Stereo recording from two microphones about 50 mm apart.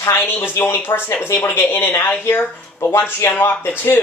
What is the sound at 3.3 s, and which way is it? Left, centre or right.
Speech, left.